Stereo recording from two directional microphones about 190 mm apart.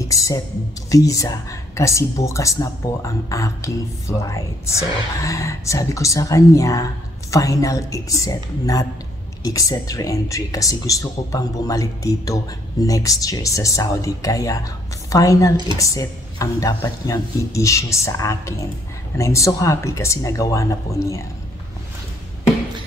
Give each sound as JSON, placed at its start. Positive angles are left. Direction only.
{"t": 0.1, "sound": "a woman's voice", "side_deg": 15}